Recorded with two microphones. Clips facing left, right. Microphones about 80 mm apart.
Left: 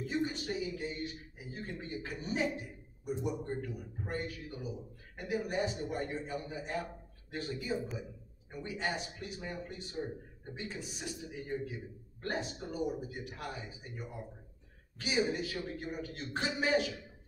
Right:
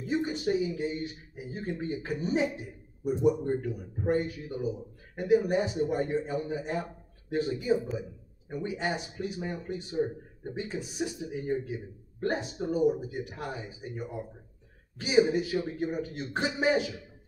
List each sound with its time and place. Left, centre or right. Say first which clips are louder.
0.0 s a man's voice: right 6 dB; right